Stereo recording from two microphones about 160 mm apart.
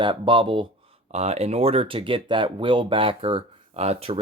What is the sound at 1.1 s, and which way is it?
Speech, 45° right (ahead or behind).